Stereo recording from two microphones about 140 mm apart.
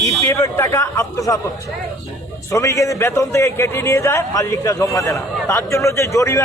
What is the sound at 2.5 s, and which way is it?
A man's voice, 20° left (ahead or behind).